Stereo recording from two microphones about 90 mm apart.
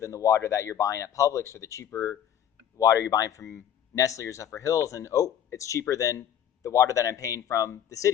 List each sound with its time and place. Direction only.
0.0 s speech: 35° left (ahead or behind)